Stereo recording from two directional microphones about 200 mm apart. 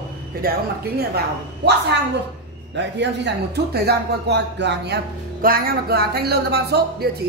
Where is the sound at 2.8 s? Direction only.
60° right (ahead or behind).